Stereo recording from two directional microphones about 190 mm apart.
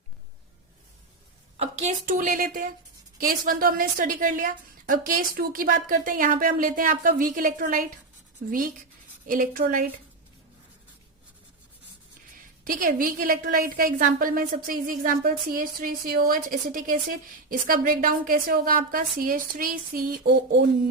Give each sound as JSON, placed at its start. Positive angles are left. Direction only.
{"t": 1.5, "sound": "a woman's voice", "side_deg": -35}
{"t": 12.6, "sound": "a woman's voice", "side_deg": -50}